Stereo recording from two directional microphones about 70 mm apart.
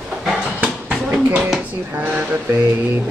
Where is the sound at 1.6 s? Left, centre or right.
Centre.